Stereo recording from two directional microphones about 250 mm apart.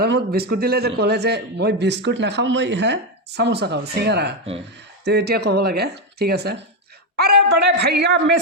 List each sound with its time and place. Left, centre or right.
0.0 s a man's voice: right